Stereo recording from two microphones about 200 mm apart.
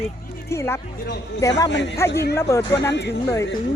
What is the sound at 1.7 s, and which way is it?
Speech, 60° left (ahead or behind).